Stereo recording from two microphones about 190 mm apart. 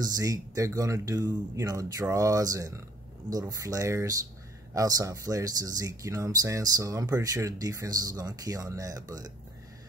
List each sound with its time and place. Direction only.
0.0 s speech: 20° right (ahead or behind)